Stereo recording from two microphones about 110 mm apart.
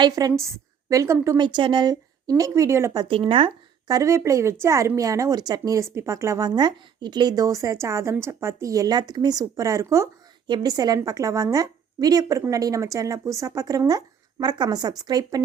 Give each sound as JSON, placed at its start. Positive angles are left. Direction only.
{"t": 0.0, "sound": "a woman's voice", "side_deg": -35}
{"t": 1.4, "sound": "speech", "side_deg": -45}
{"t": 2.4, "sound": "a woman's voice", "side_deg": -25}
{"t": 3.0, "sound": "speech", "side_deg": -55}
{"t": 3.8, "sound": "a woman's voice", "side_deg": -30}
{"t": 10.4, "sound": "speech", "side_deg": -40}